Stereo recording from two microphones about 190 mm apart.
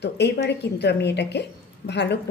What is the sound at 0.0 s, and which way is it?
A woman's voice, 60° left (ahead or behind).